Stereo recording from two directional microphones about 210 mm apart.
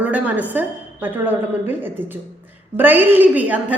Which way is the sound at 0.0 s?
5° right (ahead or behind).